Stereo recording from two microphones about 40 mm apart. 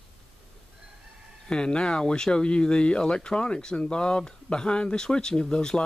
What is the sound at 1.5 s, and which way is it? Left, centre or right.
Speech, left.